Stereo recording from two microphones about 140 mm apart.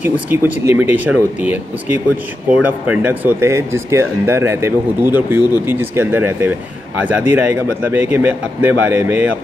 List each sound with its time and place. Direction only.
0.0 s speech: 10° right (ahead or behind)